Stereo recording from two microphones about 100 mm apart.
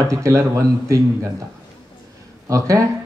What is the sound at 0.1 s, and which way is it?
Speech, 30° right (ahead or behind).